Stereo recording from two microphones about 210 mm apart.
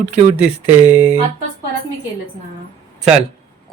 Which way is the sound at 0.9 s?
5° right (ahead or behind).